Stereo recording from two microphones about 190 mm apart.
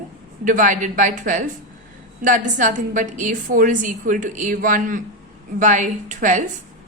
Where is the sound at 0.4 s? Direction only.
45° right (ahead or behind).